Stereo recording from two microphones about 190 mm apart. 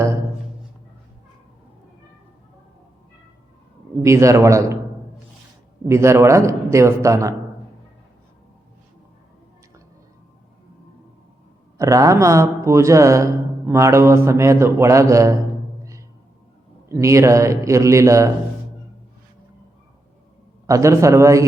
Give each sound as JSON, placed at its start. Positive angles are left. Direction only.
{"t": 4.0, "sound": "speech", "side_deg": -15}
{"t": 5.9, "sound": "speech", "side_deg": -15}
{"t": 11.8, "sound": "speech", "side_deg": -15}
{"t": 16.9, "sound": "speech", "side_deg": -15}
{"t": 20.7, "sound": "speech", "side_deg": -15}